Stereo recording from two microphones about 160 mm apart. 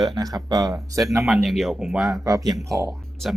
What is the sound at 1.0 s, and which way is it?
Speech, centre (ahead or behind).